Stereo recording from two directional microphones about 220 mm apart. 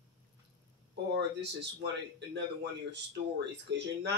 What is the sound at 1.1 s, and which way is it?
Speech, 50° right (ahead or behind).